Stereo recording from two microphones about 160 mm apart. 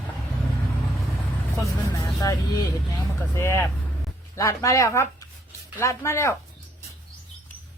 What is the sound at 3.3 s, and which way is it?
Speech, 15° left (ahead or behind).